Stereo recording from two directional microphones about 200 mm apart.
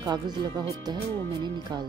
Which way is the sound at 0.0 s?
20° right (ahead or behind).